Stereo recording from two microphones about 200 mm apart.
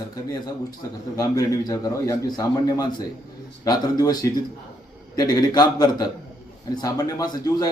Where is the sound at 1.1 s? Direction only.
15° left (ahead or behind).